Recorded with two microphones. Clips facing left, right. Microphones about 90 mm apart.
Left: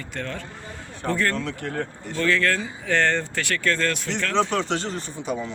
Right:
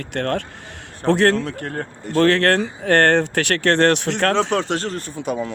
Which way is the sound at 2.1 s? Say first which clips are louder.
Right 7 dB; 65° right (ahead or behind).